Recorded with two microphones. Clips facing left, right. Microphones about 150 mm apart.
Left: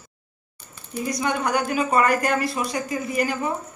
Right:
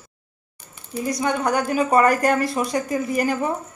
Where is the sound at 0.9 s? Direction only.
35° right (ahead or behind).